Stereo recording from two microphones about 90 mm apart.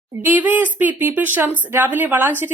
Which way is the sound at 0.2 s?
20° right (ahead or behind).